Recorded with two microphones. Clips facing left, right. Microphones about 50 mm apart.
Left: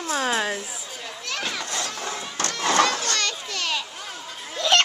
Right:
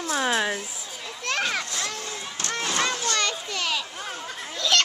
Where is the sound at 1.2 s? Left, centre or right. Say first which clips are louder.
Right 4 dB; right.